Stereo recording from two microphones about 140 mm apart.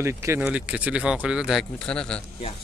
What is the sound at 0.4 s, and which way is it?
Speech, 5° right (ahead or behind).